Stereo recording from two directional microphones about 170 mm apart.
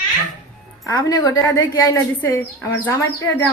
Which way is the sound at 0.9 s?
20° left (ahead or behind).